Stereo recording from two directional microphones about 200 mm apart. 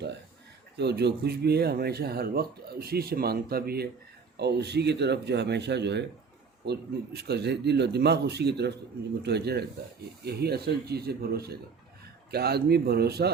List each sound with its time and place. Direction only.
0.8 s speech: 55° right (ahead or behind)